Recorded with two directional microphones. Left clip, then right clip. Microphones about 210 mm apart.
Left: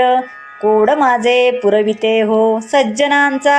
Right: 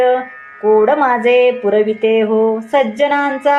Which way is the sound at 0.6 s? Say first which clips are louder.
Even; 25° left (ahead or behind).